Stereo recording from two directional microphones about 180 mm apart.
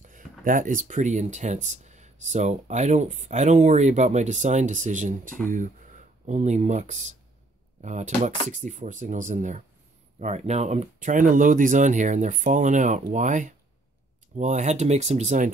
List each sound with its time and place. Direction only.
0.0 s speech: 50° right (ahead or behind)